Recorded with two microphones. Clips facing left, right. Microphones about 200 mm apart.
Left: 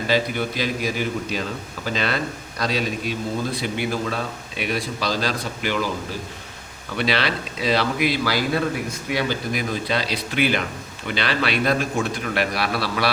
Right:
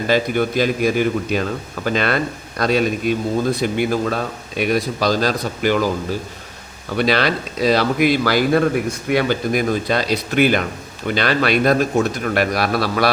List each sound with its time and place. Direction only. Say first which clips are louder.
0.1 s a man's voice: right 5 dB; 50° right (ahead or behind)
6.9 s a man's voice: right 5 dB; 45° right (ahead or behind)